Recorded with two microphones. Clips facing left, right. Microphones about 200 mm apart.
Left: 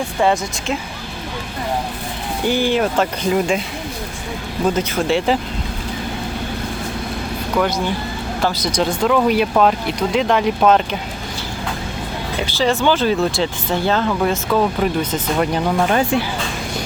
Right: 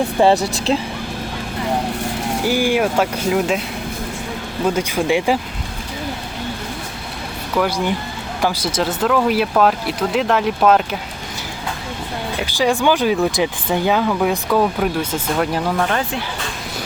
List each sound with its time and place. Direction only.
0.2 s speech: 30° right (ahead or behind)
2.4 s speech: 10° right (ahead or behind)
4.7 s speech: 10° right (ahead or behind)
8.4 s speech: 10° right (ahead or behind)
12.5 s speech: 15° right (ahead or behind)